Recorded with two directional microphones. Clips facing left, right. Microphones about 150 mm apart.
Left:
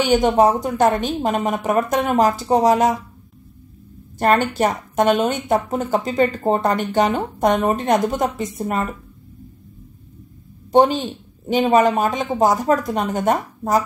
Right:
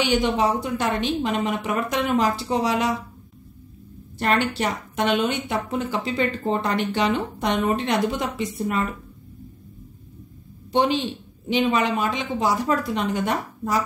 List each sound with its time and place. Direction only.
0.0 s a woman's voice: 45° left (ahead or behind)
4.2 s a woman's voice: 45° left (ahead or behind)
10.7 s a woman's voice: 45° left (ahead or behind)